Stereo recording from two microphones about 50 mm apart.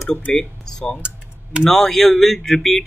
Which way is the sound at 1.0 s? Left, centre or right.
Right.